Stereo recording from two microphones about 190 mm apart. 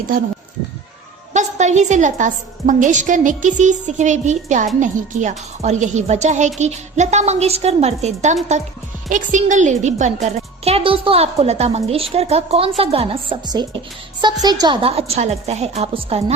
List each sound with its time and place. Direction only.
1.3 s a woman's voice: 40° right (ahead or behind)